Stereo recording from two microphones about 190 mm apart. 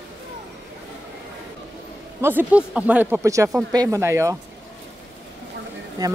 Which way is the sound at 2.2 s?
10° right (ahead or behind).